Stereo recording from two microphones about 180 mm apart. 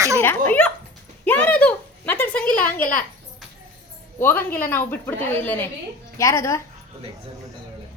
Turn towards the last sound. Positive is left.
turn(degrees=15)  # may be behind; listen again after turning